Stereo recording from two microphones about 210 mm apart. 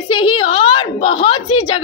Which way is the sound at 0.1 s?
25° left (ahead or behind).